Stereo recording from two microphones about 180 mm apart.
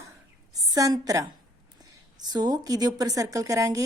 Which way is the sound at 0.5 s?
20° right (ahead or behind).